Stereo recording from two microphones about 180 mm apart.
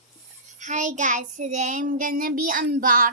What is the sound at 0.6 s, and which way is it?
Child singing, 45° right (ahead or behind).